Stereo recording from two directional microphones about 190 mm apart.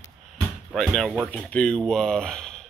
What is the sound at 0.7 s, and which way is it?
Speech, 5° left (ahead or behind).